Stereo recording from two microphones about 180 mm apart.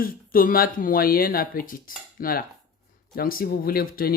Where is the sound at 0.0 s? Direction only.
55° left (ahead or behind).